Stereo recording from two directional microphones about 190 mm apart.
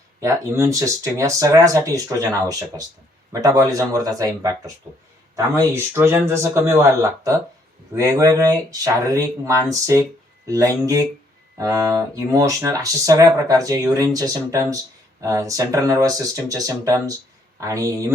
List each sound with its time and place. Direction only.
0.2 s speech: 15° right (ahead or behind)